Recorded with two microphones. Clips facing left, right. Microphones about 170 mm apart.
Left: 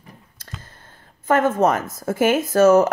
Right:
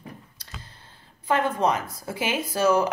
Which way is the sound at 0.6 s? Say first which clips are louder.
Left 3 dB; 50° left (ahead or behind).